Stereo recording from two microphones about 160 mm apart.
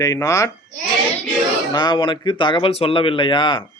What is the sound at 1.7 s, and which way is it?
Speech, 30° left (ahead or behind).